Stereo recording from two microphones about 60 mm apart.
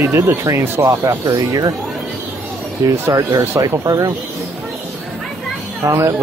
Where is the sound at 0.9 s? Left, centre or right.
Right.